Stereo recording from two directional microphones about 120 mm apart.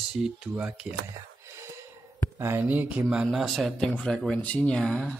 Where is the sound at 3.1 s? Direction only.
5° right (ahead or behind).